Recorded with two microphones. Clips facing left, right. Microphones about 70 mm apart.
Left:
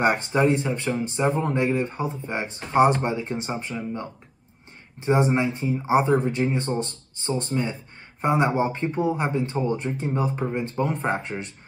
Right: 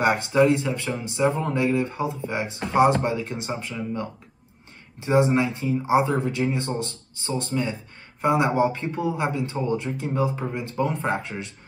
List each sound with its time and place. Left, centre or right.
0.0 s speech: left